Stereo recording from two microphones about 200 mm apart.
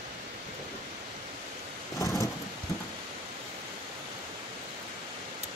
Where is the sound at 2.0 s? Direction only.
15° left (ahead or behind).